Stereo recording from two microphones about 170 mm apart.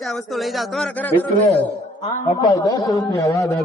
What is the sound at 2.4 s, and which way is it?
A man's voice, 20° left (ahead or behind).